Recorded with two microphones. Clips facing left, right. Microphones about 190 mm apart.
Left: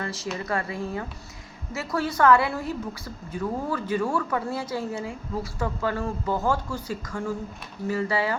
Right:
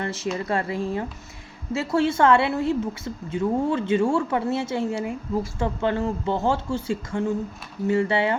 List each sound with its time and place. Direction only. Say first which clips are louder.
0.0 s a woman's voice: right 4 dB; 25° right (ahead or behind)